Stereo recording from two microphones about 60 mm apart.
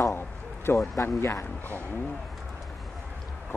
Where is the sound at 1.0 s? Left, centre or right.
Left.